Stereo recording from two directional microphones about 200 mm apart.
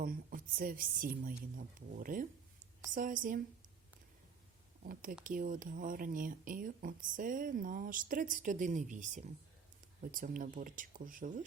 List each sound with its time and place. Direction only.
0.0 s speech: 45° right (ahead or behind)
4.8 s speech: 45° right (ahead or behind)